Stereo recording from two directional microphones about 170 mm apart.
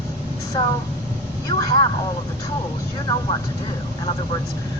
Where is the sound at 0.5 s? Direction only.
20° left (ahead or behind).